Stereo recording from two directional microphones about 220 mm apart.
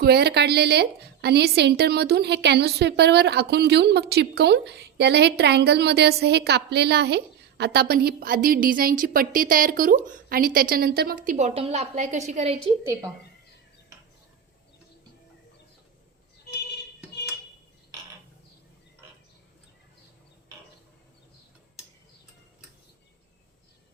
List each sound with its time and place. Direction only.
0.0 s a woman's voice: 45° right (ahead or behind); by 12.5 s 30° right (ahead or behind)
12.8 s speech: 15° right (ahead or behind)